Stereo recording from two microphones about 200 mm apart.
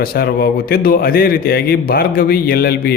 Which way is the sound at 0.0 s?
50° left (ahead or behind).